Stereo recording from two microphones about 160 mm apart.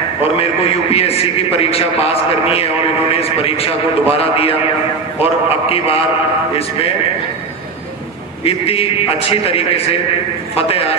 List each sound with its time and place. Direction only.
0.2 s a man's voice: 40° left (ahead or behind)
8.5 s a man's voice: 35° left (ahead or behind)